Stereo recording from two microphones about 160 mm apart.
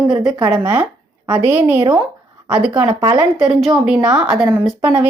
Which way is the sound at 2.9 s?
25° right (ahead or behind).